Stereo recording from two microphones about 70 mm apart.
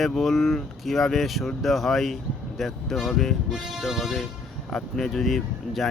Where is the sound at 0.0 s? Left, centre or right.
Centre.